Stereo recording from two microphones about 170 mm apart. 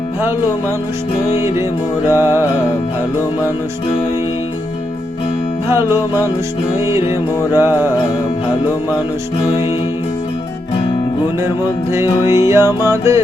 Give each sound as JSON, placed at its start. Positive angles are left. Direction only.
{"t": 1.4, "sound": "music", "side_deg": -15}
{"t": 5.6, "sound": "music", "side_deg": -15}
{"t": 11.9, "sound": "music", "side_deg": -15}